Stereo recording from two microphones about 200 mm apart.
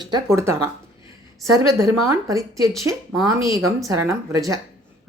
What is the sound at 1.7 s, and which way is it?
Speech, 15° right (ahead or behind).